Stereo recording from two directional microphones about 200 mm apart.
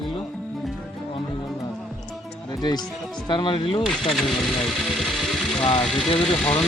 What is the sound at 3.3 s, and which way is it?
Speech, 25° left (ahead or behind).